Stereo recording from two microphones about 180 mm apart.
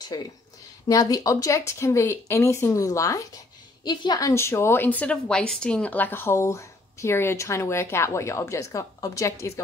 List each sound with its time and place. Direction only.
0.1 s a woman's voice: 20° left (ahead or behind)